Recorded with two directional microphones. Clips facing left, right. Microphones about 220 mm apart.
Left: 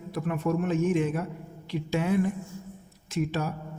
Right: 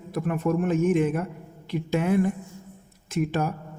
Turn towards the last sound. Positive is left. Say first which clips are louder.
# right 3 dB
turn(degrees=-55)  # may be behind; listen again after turning